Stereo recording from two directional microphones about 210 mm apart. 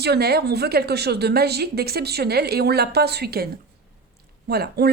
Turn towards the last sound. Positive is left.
turn(degrees=-50)  # may be behind; listen again after turning